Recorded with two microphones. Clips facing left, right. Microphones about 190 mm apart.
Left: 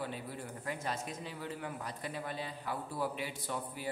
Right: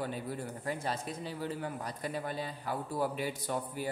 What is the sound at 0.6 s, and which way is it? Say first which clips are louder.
Speech: right 2 dB; 35° right (ahead or behind).